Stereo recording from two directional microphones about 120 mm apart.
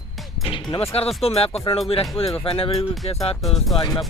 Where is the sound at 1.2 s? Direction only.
55° left (ahead or behind).